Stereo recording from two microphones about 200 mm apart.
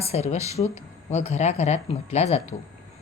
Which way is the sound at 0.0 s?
30° left (ahead or behind).